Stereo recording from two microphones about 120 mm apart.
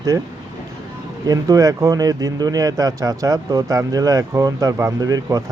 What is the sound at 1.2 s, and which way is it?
Speech, 30° right (ahead or behind).